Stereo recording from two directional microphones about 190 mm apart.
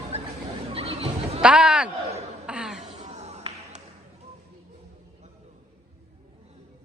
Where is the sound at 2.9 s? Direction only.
35° right (ahead or behind).